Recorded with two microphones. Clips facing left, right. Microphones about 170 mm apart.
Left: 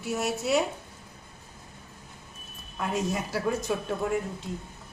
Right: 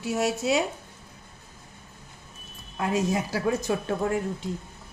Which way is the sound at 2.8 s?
90° right.